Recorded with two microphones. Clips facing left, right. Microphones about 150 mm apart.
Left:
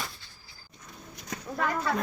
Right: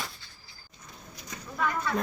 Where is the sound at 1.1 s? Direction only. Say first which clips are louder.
Left 2 dB; 60° left (ahead or behind).